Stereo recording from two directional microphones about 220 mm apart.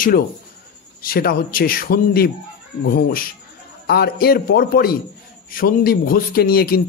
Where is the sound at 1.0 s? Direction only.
40° left (ahead or behind).